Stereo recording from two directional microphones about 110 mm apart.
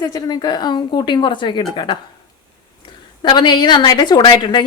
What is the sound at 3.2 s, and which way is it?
A woman's voice, 45° left (ahead or behind).